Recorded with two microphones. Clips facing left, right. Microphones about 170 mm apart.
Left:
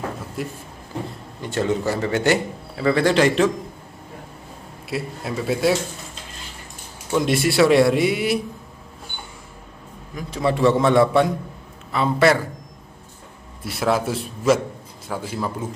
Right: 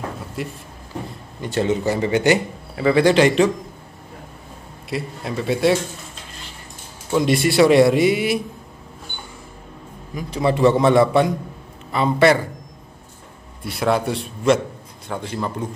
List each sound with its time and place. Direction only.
0.4 s speech: centre (ahead or behind)
4.8 s speech: centre (ahead or behind)
7.1 s speech: centre (ahead or behind)
10.1 s speech: centre (ahead or behind)
13.7 s speech: centre (ahead or behind)